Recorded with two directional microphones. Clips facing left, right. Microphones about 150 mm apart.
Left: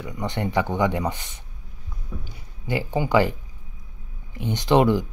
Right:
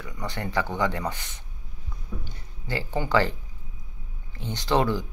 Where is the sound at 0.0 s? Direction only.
20° left (ahead or behind).